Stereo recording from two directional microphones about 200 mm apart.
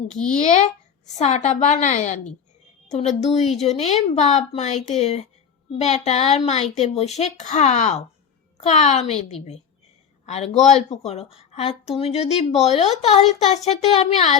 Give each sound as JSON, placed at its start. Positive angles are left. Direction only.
{"t": 0.1, "sound": "speech", "side_deg": 40}